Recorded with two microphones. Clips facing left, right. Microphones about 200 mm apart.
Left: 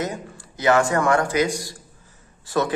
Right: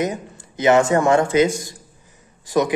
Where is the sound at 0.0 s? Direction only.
20° right (ahead or behind).